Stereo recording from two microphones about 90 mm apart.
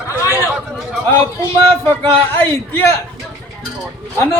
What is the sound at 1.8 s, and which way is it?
A man's voice, 25° left (ahead or behind).